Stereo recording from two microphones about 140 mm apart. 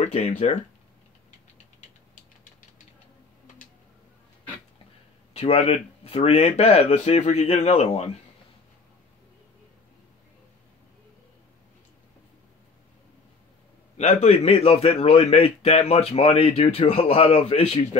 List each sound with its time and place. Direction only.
0.0 s speech: 60° left (ahead or behind)
5.3 s a man's voice: 50° left (ahead or behind)
13.9 s a man's voice: 50° left (ahead or behind)